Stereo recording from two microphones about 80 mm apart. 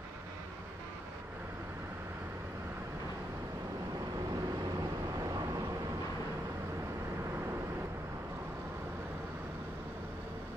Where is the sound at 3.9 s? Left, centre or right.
Right.